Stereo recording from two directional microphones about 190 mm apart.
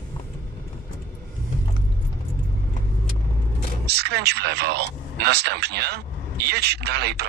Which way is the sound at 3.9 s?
60° right (ahead or behind).